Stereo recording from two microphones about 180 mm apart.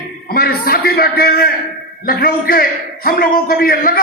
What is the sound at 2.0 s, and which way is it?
A man's voice, 55° left (ahead or behind).